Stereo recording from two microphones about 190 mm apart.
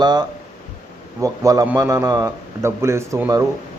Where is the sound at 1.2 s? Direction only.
20° right (ahead or behind).